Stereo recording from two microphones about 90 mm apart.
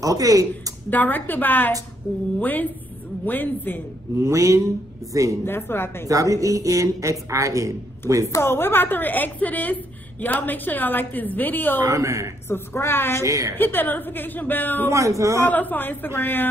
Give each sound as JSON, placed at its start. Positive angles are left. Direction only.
{"t": 0.0, "sound": "speech", "side_deg": -40}
{"t": 0.8, "sound": "a woman's voice", "side_deg": 20}
{"t": 4.2, "sound": "a woman's voice", "side_deg": -35}
{"t": 5.4, "sound": "a woman's voice", "side_deg": 25}
{"t": 6.0, "sound": "a woman's voice", "side_deg": -40}
{"t": 8.3, "sound": "a woman's voice", "side_deg": 30}
{"t": 11.8, "sound": "a woman's voice", "side_deg": -40}
{"t": 12.4, "sound": "a woman's voice", "side_deg": 25}
{"t": 13.2, "sound": "a woman's voice", "side_deg": -35}
{"t": 13.6, "sound": "a woman's voice", "side_deg": 20}
{"t": 14.9, "sound": "a woman's voice", "side_deg": -35}
{"t": 15.4, "sound": "a woman's voice", "side_deg": 20}